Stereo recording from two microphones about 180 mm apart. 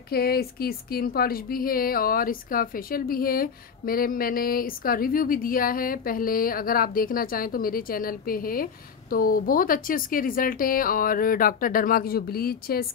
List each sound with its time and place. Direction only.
0.1 s a woman's voice: 60° left (ahead or behind)